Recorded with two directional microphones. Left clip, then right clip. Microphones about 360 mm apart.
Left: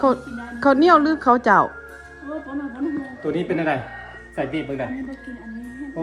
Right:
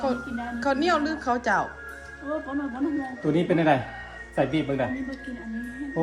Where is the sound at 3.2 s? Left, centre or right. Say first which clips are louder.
Even; right.